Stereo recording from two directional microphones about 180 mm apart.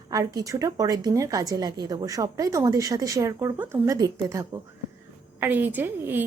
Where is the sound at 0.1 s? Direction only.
20° right (ahead or behind).